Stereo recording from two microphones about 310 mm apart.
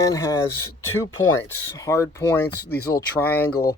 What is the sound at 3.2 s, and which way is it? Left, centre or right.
Speech, centre.